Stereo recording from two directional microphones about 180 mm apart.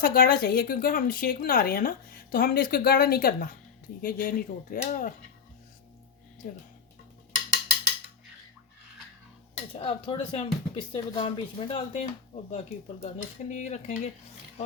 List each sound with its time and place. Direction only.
0.0 s speech: 55° left (ahead or behind)
9.7 s speech: 35° left (ahead or behind)
13.5 s cutlery: 40° left (ahead or behind)